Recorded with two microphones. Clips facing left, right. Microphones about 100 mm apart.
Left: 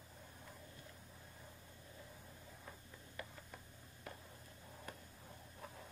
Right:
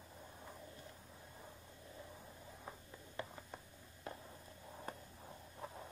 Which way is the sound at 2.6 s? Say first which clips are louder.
Right 3 dB; 30° right (ahead or behind).